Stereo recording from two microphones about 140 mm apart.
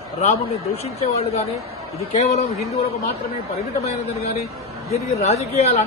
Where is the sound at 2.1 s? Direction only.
60° left (ahead or behind).